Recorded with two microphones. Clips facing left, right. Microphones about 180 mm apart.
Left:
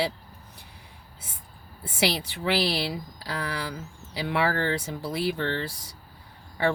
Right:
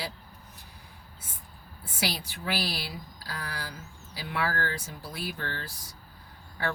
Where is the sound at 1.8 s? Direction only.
75° left (ahead or behind).